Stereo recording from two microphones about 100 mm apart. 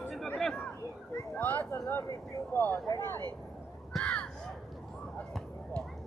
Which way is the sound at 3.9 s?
5° left (ahead or behind).